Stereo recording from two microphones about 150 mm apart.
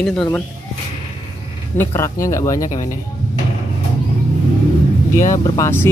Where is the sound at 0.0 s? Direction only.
10° left (ahead or behind).